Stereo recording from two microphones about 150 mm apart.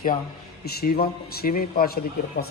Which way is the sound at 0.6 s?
90° left.